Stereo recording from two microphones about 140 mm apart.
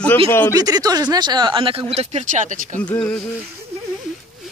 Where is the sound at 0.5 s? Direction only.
25° right (ahead or behind); by 2.8 s 65° right (ahead or behind).